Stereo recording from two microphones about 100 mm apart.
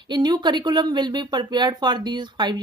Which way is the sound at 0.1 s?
45° right (ahead or behind).